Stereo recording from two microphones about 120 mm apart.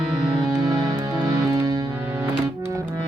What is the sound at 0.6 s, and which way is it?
Music, 35° right (ahead or behind).